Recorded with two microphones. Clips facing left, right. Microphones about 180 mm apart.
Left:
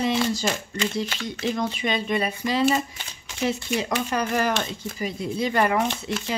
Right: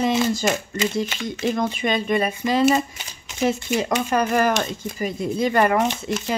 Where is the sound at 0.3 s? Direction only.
50° right (ahead or behind).